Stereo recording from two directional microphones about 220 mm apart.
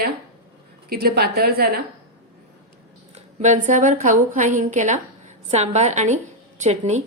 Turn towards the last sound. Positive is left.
turn(degrees=-30)  # may be behind; listen again after turning